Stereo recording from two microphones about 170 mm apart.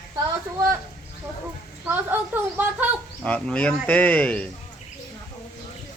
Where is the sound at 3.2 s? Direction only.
5° left (ahead or behind).